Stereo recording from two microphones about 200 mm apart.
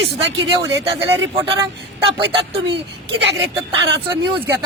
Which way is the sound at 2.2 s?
25° right (ahead or behind).